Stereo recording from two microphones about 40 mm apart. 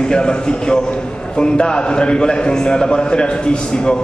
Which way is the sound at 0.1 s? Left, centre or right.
Left.